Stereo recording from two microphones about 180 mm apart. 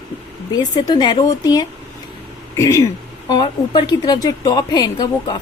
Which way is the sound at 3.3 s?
25° left (ahead or behind).